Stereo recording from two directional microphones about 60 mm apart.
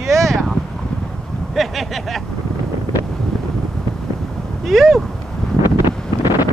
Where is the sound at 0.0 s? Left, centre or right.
Centre.